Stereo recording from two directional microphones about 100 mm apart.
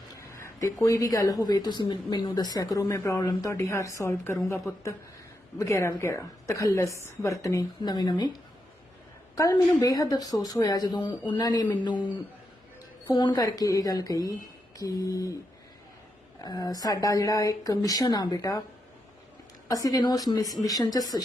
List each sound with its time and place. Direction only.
0.2 s a woman's voice: 30° left (ahead or behind)
9.3 s a woman's voice: 40° left (ahead or behind)
16.4 s a woman's voice: 40° left (ahead or behind)
19.6 s a woman's voice: 35° left (ahead or behind)